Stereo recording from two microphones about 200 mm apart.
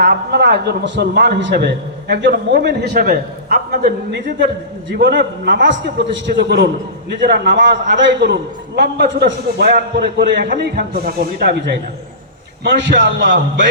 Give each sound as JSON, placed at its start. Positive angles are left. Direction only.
{"t": 0.0, "sound": "a man's voice", "side_deg": -55}